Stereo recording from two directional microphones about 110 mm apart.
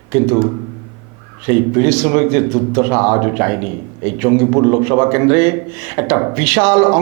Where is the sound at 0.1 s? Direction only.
20° right (ahead or behind).